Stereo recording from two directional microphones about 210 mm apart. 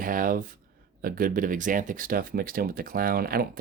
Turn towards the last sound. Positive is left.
turn(degrees=-45)  # may be behind; listen again after turning